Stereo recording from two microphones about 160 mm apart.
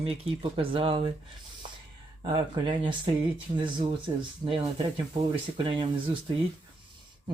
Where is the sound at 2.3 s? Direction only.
30° right (ahead or behind).